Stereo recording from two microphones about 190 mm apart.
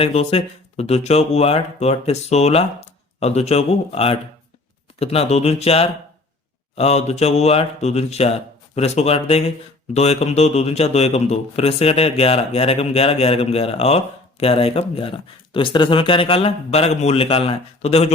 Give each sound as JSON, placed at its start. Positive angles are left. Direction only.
{"t": 0.0, "sound": "a man's voice", "side_deg": 30}